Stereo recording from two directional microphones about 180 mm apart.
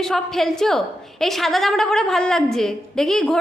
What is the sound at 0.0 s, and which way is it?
A woman's voice, centre (ahead or behind).